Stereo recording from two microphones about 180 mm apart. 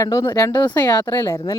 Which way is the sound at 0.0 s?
15° left (ahead or behind).